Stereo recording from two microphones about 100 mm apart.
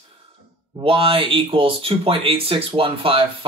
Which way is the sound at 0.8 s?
65° right (ahead or behind).